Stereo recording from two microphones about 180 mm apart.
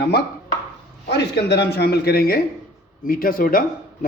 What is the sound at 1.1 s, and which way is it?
A man's voice, 70° left (ahead or behind).